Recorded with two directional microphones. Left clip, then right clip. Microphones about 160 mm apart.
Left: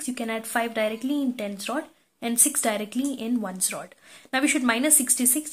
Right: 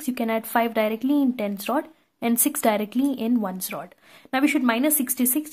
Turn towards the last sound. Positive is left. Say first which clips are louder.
# right 1 dB
turn(degrees=-35)  # may be behind; listen again after turning